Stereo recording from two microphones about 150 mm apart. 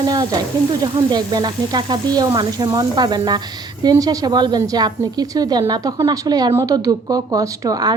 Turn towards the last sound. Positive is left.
turn(degrees=-25)  # may be behind; listen again after turning